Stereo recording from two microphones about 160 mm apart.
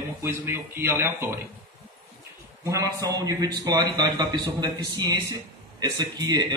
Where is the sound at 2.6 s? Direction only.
20° right (ahead or behind).